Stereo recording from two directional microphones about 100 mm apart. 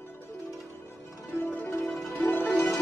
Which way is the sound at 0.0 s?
25° left (ahead or behind).